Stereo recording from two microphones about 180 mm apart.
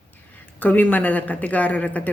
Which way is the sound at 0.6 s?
10° left (ahead or behind).